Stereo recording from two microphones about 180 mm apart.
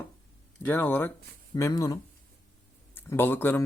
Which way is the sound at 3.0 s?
10° left (ahead or behind).